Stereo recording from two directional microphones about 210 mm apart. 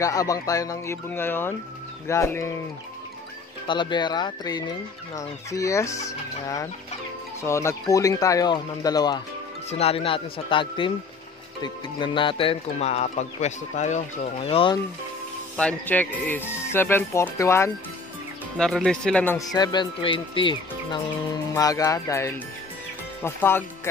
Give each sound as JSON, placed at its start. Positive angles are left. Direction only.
{"t": 0.0, "sound": "a man's voice", "side_deg": 15}
{"t": 3.6, "sound": "a man's voice", "side_deg": 20}
{"t": 9.7, "sound": "speech", "side_deg": 30}
{"t": 15.5, "sound": "a man's voice", "side_deg": 5}